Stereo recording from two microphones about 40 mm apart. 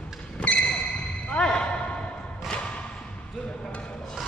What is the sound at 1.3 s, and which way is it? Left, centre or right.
Basketball bounce, left.